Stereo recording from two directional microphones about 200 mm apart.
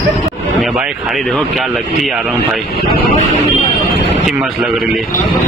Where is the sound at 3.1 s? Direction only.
30° left (ahead or behind).